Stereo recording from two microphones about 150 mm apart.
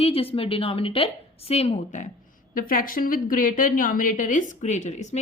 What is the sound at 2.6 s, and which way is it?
A woman's voice, 65° left (ahead or behind).